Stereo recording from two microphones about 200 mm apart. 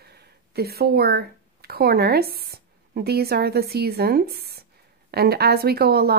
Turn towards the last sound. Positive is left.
turn(degrees=-50)  # may be behind; listen again after turning